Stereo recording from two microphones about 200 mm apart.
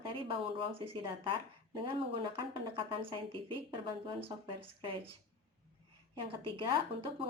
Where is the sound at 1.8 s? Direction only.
25° right (ahead or behind).